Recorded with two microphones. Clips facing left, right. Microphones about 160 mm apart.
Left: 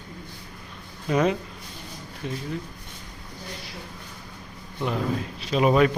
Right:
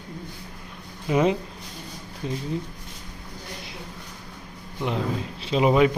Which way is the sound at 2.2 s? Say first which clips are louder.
Right 2 dB; 30° right (ahead or behind).